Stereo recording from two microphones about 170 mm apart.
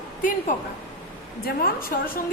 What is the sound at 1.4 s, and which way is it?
Speech, 60° left (ahead or behind).